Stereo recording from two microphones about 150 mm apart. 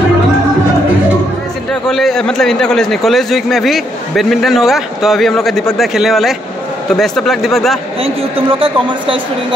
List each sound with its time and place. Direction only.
1.7 s a man's voice: centre (ahead or behind)
8.0 s a man's voice: 40° right (ahead or behind)